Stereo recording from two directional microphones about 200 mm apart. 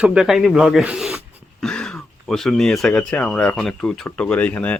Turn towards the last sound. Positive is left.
turn(degrees=5)  # may be behind; listen again after turning